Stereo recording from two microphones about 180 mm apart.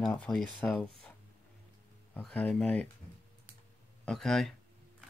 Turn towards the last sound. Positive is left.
turn(degrees=0)  # may be behind; listen again after turning